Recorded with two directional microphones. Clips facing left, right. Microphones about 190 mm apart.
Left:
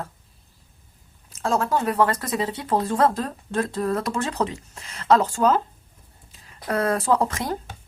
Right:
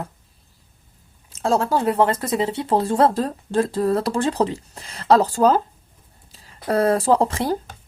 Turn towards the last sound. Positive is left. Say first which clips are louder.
# right 4 dB
turn(degrees=-30)  # may be behind; listen again after turning